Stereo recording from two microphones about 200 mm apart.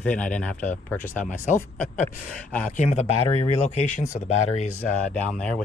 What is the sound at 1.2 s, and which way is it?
Speech, 40° left (ahead or behind).